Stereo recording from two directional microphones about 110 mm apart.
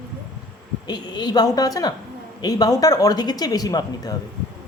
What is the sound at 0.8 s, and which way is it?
Speech, 40° left (ahead or behind).